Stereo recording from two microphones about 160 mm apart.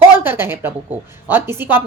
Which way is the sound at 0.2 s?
15° right (ahead or behind).